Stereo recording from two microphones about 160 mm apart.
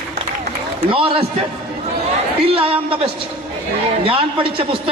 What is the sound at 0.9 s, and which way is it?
Speech, 35° right (ahead or behind).